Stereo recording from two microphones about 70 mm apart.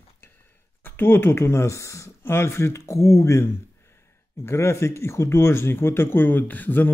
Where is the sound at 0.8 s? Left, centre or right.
Left.